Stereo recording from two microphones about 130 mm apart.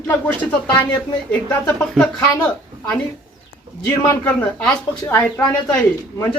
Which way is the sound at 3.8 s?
25° left (ahead or behind).